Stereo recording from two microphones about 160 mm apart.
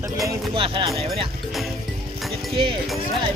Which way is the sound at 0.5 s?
35° right (ahead or behind).